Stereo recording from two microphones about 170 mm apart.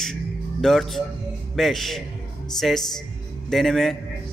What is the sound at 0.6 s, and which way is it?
Speech, centre (ahead or behind).